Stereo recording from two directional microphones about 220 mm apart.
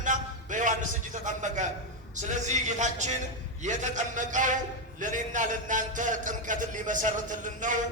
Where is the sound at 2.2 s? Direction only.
35° right (ahead or behind).